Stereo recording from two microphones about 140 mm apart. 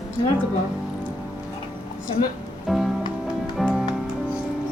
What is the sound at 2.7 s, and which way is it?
Music, centre (ahead or behind).